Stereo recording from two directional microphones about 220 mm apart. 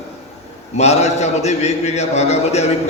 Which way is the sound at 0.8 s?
30° left (ahead or behind).